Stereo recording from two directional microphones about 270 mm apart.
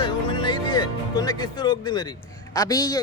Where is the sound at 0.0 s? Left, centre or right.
Centre.